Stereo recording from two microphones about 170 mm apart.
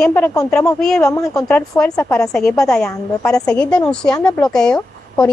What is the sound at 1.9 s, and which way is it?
Speech, 20° left (ahead or behind).